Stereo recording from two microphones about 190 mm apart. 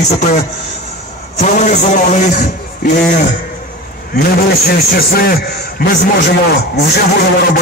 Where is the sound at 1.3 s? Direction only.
40° left (ahead or behind).